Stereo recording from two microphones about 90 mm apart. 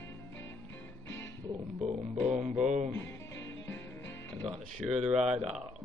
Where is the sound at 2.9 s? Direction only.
30° left (ahead or behind).